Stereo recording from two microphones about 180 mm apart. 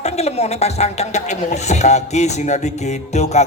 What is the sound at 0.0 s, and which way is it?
Speech, 35° left (ahead or behind).